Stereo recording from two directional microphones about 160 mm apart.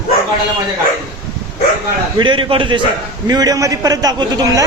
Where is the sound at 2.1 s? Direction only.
30° right (ahead or behind).